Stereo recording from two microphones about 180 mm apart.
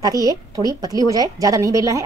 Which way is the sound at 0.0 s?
20° right (ahead or behind).